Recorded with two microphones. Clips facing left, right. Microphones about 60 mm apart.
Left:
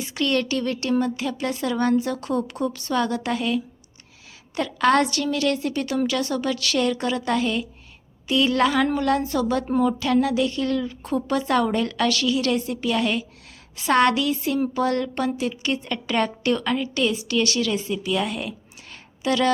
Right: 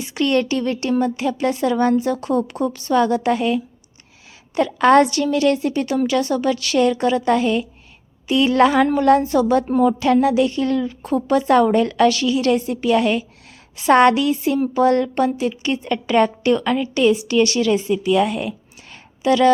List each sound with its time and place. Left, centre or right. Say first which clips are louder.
0.2 s a woman's voice: right 5 dB; right